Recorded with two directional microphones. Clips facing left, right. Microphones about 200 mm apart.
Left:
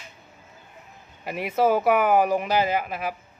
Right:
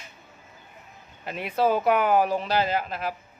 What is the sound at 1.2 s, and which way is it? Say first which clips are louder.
Speech: left 2 dB; 10° left (ahead or behind).